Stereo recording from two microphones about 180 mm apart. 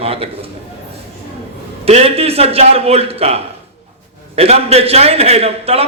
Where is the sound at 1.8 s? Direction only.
35° right (ahead or behind).